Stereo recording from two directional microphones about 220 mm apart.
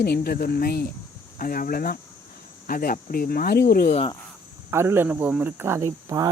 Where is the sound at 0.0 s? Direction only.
45° left (ahead or behind).